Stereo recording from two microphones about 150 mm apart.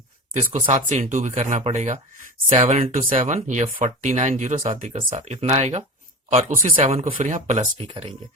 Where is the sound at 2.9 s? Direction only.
60° right (ahead or behind).